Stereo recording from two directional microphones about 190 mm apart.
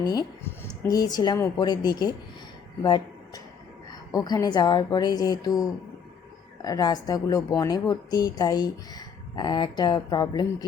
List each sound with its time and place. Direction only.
0.0 s speech: 20° left (ahead or behind)